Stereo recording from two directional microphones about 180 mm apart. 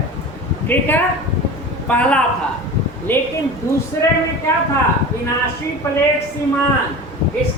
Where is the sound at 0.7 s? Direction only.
10° left (ahead or behind).